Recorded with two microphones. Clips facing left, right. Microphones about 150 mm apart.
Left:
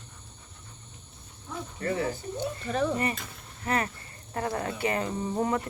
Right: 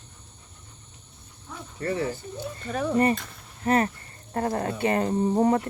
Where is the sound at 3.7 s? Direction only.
35° right (ahead or behind).